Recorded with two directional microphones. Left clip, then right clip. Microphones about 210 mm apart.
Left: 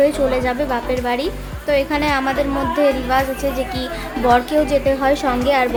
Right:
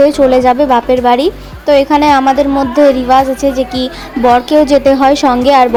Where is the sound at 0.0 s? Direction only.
30° right (ahead or behind).